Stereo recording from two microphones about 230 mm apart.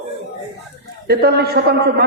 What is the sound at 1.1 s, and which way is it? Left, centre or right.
Speech, right.